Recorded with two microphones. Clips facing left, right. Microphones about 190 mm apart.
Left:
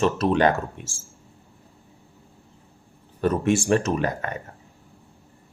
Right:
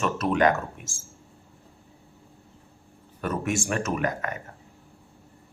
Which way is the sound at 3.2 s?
30° left (ahead or behind).